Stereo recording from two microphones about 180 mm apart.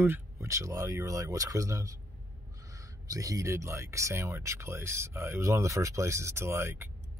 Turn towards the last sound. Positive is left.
turn(degrees=-15)  # may be behind; listen again after turning